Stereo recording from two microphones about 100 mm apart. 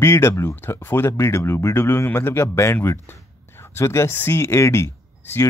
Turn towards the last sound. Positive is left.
turn(degrees=25)  # may be behind; listen again after turning